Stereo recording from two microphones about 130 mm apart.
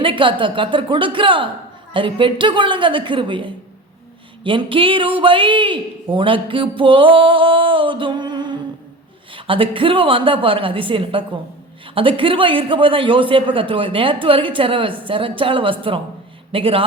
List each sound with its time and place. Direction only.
0.0 s a woman's voice: 40° right (ahead or behind)